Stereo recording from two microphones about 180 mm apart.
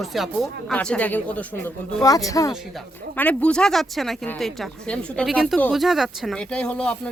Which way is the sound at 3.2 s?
10° left (ahead or behind).